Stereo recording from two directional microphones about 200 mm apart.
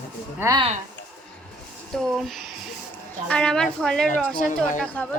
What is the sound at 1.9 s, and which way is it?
A woman's voice, centre (ahead or behind).